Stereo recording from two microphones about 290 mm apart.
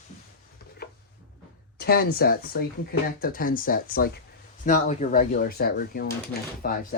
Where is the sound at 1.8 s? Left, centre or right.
Left.